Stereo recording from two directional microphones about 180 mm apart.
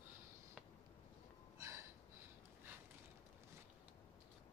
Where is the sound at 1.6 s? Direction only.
15° right (ahead or behind).